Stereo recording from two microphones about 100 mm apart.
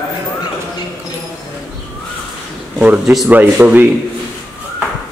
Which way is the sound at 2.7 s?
15° right (ahead or behind).